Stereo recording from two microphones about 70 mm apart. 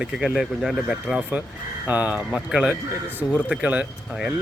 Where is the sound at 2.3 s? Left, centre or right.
Centre.